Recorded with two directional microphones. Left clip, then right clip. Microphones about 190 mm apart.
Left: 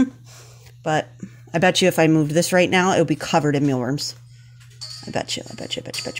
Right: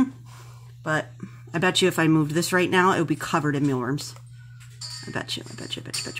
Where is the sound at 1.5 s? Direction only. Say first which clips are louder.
Left 5 dB; 25° left (ahead or behind).